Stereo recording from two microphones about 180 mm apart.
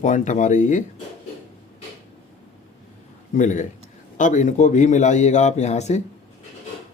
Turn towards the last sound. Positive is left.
turn(degrees=40)  # may be behind; listen again after turning